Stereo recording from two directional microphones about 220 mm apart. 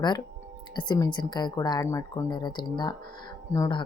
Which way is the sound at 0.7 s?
20° left (ahead or behind).